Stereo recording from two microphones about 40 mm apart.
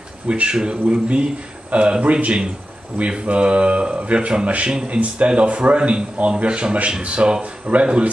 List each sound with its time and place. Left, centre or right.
0.3 s speech: right